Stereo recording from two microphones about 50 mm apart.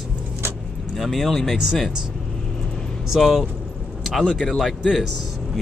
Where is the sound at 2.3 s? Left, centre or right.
Centre.